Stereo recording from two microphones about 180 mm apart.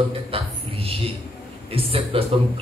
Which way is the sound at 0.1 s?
30° right (ahead or behind).